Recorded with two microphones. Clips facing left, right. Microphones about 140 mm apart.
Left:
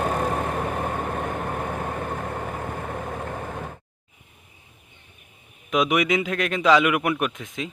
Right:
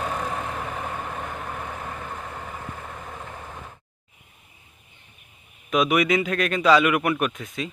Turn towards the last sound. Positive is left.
turn(degrees=15)  # may be behind; listen again after turning